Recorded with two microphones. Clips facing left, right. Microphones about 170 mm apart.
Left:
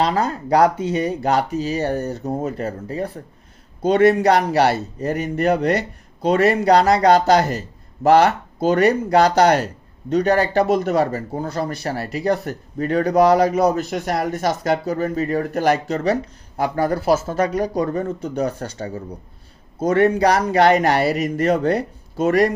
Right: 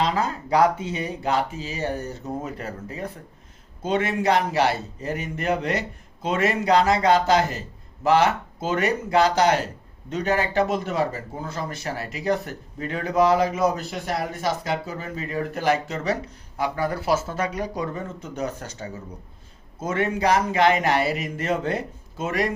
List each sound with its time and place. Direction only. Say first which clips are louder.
0.1 s speech: left 4 dB; 40° left (ahead or behind)